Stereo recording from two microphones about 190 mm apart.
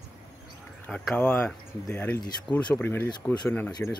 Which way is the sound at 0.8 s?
5° left (ahead or behind).